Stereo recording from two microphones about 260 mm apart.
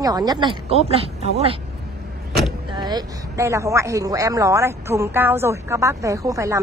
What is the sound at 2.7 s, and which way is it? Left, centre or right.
Speech, centre.